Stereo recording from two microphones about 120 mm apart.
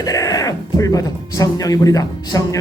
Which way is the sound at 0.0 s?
30° left (ahead or behind).